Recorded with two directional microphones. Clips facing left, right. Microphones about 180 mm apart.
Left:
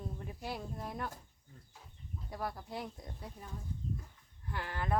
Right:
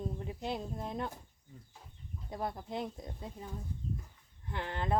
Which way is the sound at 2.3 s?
20° right (ahead or behind).